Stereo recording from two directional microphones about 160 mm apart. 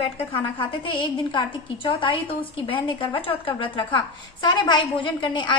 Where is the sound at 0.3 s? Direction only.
30° left (ahead or behind).